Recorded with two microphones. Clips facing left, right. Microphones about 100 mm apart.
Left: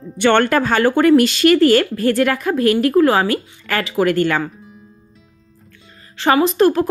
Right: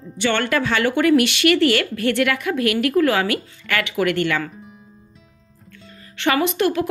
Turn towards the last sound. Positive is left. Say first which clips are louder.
# left 6 dB
turn(degrees=35)  # may be behind; listen again after turning